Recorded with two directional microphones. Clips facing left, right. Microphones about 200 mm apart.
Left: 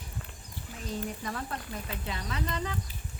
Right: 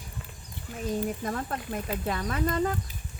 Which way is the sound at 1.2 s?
45° right (ahead or behind).